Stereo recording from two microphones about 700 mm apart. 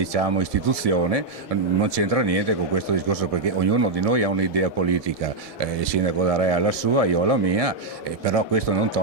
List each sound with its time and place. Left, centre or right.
0.0 s a man's voice: right